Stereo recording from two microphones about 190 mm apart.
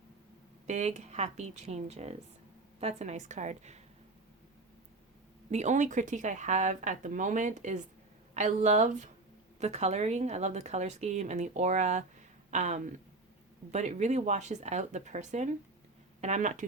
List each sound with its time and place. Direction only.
0.7 s a woman's voice: 35° right (ahead or behind)
5.5 s a woman's voice: 35° right (ahead or behind)